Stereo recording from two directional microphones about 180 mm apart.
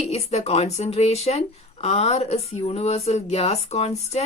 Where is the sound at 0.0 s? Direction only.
35° left (ahead or behind).